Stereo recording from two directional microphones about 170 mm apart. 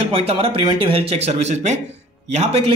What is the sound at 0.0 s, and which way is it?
Speech, 35° right (ahead or behind).